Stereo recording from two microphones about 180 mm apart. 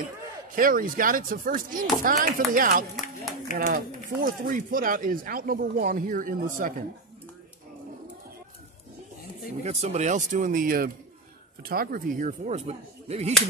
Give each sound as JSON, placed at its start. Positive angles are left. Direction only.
{"t": 0.6, "sound": "speech", "side_deg": -50}
{"t": 9.6, "sound": "speech", "side_deg": -40}